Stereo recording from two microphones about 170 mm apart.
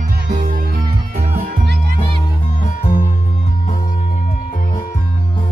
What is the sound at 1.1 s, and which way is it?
Music, 45° right (ahead or behind).